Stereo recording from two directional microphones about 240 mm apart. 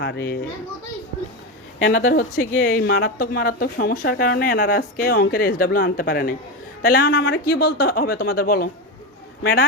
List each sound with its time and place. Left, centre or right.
0.0 s a child's voice: left
1.8 s a child's voice: left
2.0 s speech: left